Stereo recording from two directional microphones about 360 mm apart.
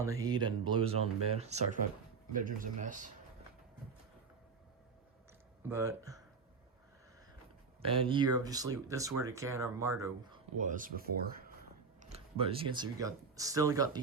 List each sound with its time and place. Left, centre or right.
0.0 s speech: centre
5.6 s speech: centre
7.8 s speech: centre
10.6 s speech: right